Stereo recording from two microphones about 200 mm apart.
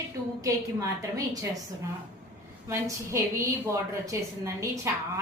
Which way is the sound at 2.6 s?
15° right (ahead or behind).